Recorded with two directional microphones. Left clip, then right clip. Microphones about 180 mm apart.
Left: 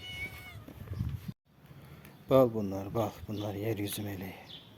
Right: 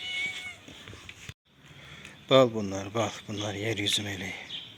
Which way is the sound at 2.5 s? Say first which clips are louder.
Right 2 dB; 10° right (ahead or behind).